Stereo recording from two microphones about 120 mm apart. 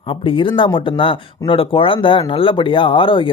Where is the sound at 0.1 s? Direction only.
45° left (ahead or behind).